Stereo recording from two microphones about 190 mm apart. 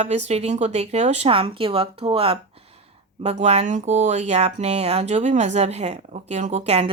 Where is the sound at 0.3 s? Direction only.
35° right (ahead or behind).